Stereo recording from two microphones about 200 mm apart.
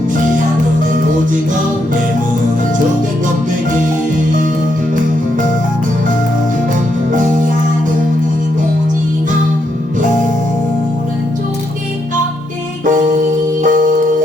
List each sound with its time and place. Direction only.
12.8 s music: 40° right (ahead or behind)